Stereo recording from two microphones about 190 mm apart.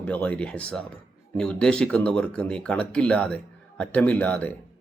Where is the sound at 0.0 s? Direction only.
5° left (ahead or behind).